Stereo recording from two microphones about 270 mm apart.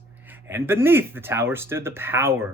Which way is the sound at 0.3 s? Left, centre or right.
Centre.